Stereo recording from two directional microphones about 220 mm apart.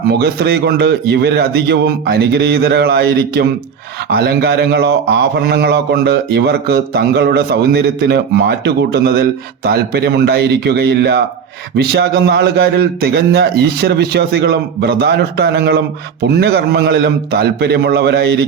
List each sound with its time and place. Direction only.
0.1 s a man's voice: 45° right (ahead or behind)